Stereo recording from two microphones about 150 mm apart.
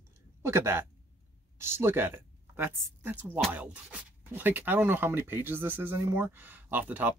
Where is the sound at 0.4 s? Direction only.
15° right (ahead or behind).